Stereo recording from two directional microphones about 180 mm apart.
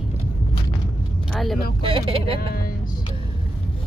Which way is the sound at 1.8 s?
30° right (ahead or behind).